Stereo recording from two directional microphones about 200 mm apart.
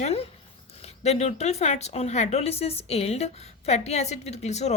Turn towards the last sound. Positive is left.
turn(degrees=35)  # may be behind; listen again after turning